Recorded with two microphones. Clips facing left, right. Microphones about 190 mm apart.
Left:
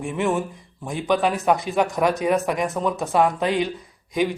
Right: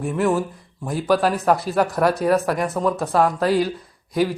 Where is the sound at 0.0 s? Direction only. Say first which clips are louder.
Right 3 dB; centre (ahead or behind).